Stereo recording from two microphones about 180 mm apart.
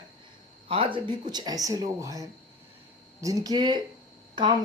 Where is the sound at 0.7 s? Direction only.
30° right (ahead or behind).